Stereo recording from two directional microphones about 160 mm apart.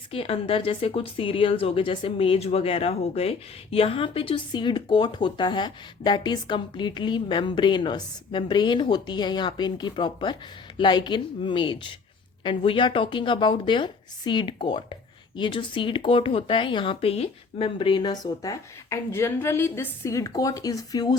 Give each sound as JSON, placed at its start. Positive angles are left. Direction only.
{"t": 0.1, "sound": "speech", "side_deg": 35}